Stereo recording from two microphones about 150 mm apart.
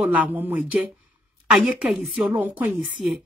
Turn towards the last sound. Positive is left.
turn(degrees=0)  # may be behind; listen again after turning